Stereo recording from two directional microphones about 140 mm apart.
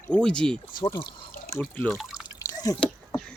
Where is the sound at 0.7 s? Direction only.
35° left (ahead or behind).